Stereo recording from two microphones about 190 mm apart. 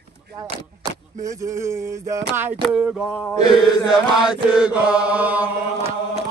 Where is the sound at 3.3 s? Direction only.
20° left (ahead or behind).